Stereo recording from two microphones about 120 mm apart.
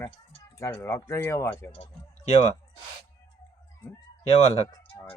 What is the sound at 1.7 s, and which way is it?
Speech, 50° left (ahead or behind).